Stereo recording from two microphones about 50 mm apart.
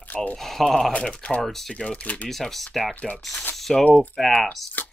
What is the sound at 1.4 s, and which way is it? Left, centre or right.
Speech, centre.